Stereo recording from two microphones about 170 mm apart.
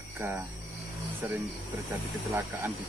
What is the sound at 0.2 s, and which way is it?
Speech, 15° right (ahead or behind).